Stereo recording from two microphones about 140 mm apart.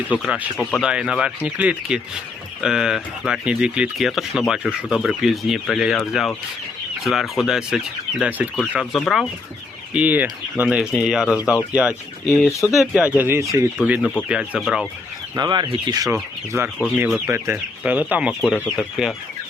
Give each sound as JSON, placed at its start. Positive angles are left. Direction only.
{"t": 0.1, "sound": "speech", "side_deg": -5}
{"t": 0.5, "sound": "speech", "side_deg": 10}
{"t": 0.8, "sound": "speech", "side_deg": -5}
{"t": 9.9, "sound": "speech", "side_deg": -10}
{"t": 12.5, "sound": "speech", "side_deg": 20}
{"t": 12.7, "sound": "speech", "side_deg": -5}
{"t": 15.4, "sound": "speech", "side_deg": -30}
{"t": 16.5, "sound": "speech", "side_deg": -15}